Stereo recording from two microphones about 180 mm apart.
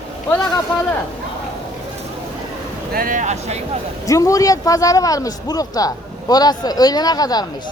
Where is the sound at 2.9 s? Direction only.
50° right (ahead or behind).